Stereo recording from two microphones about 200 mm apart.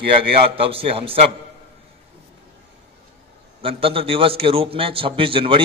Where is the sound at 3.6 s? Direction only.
30° right (ahead or behind).